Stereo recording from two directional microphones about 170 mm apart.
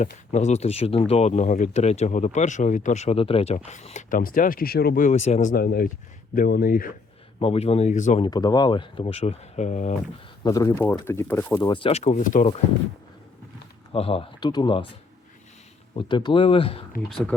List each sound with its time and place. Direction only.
0.0 s speech: 45° left (ahead or behind); by 5.0 s 65° left (ahead or behind)
5.0 s speech: 40° left (ahead or behind); by 6.9 s 55° left (ahead or behind)
7.3 s speech: 35° left (ahead or behind)
8.2 s speech: 25° left (ahead or behind); by 9.9 s 45° left (ahead or behind)
10.4 s speech: 20° left (ahead or behind)
11.5 s speech: 25° left (ahead or behind); by 12.5 s 50° left (ahead or behind)
13.9 s speech: 35° left (ahead or behind)
16.0 s speech: 30° left (ahead or behind)